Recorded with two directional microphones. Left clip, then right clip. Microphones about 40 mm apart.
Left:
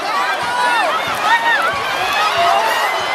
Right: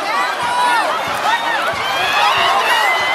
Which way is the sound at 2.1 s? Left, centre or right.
Right.